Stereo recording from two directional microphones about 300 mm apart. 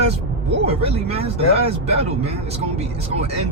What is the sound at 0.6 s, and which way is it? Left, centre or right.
Speech, centre.